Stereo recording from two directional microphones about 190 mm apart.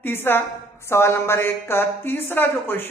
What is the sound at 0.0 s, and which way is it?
A woman's voice, 10° left (ahead or behind).